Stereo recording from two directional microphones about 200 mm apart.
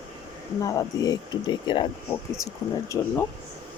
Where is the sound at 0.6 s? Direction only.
15° left (ahead or behind).